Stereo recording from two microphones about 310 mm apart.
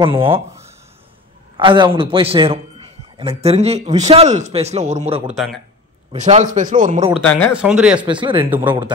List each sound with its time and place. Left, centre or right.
0.0 s a man's voice: centre
5.2 s speech: centre
6.1 s a man's voice: right
7.1 s speech: centre
8.0 s speech: centre